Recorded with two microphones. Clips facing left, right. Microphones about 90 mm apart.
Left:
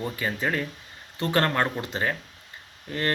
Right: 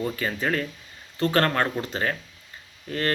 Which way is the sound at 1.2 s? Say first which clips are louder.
Right 2 dB; 15° left (ahead or behind).